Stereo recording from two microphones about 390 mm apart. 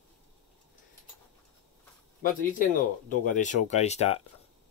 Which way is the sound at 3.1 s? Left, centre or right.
Centre.